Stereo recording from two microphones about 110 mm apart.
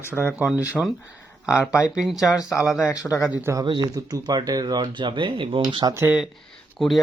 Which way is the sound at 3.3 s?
20° right (ahead or behind).